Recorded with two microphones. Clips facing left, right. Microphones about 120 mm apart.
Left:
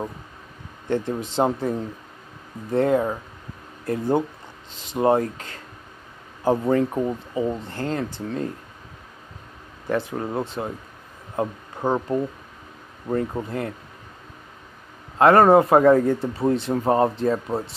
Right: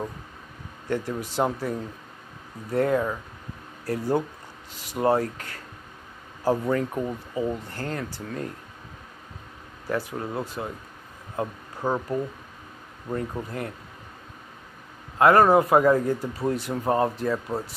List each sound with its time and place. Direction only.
0.8 s speech: 25° left (ahead or behind)
9.8 s speech: 25° left (ahead or behind)
13.3 s speech: 25° left (ahead or behind)
15.1 s speech: 30° left (ahead or behind)